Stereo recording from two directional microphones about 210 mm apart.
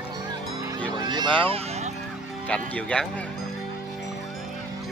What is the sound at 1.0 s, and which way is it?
Speech, 20° right (ahead or behind).